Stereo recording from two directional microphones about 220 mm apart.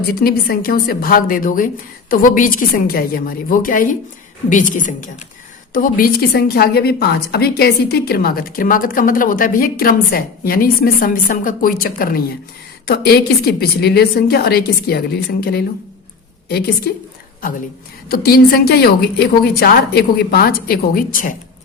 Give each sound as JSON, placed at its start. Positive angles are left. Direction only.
{"t": 0.2, "sound": "a woman's voice", "side_deg": 45}